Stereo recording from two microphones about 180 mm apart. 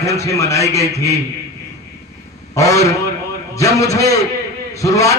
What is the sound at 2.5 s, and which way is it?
A man's voice, 15° left (ahead or behind).